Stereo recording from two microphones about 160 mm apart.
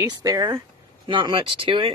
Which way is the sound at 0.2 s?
20° right (ahead or behind).